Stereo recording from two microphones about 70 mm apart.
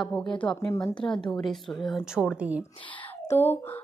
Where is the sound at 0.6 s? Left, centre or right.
Left.